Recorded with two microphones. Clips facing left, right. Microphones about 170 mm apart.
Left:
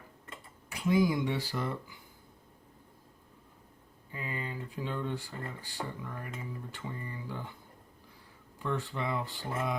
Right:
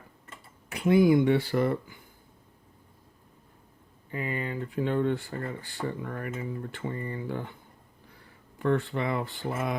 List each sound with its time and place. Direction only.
0.7 s speech: 60° right (ahead or behind)
4.1 s speech: 65° right (ahead or behind)
8.5 s speech: 60° right (ahead or behind)